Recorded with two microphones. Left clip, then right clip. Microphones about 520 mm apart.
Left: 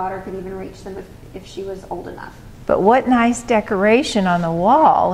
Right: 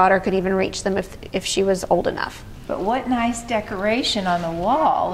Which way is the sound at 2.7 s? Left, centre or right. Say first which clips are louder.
Left 8 dB; left.